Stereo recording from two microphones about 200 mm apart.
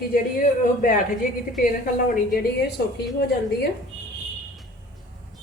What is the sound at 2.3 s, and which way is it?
A woman's voice, 55° left (ahead or behind).